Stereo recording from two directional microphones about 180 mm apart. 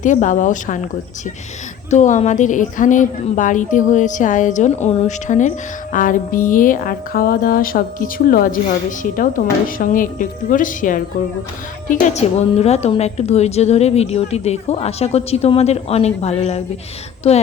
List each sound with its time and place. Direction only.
0.0 s a woman's voice: 45° left (ahead or behind)
1.9 s a woman's voice: 40° left (ahead or behind)